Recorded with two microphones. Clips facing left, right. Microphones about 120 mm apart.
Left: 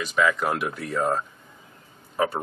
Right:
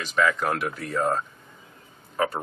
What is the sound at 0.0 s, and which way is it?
Speech, 5° left (ahead or behind).